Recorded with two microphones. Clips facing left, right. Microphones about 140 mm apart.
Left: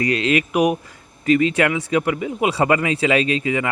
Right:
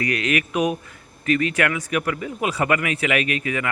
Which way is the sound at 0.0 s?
25° left (ahead or behind).